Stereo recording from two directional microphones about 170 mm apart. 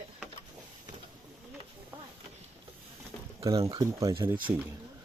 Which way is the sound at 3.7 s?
20° right (ahead or behind).